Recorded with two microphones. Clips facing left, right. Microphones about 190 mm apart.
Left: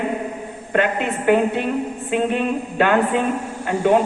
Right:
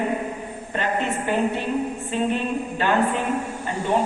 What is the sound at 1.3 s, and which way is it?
Speech, 60° left (ahead or behind).